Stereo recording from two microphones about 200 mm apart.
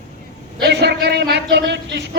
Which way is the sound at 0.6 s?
55° right (ahead or behind).